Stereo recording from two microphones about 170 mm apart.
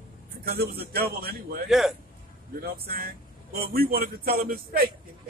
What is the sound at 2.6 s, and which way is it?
A man's voice, 65° right (ahead or behind).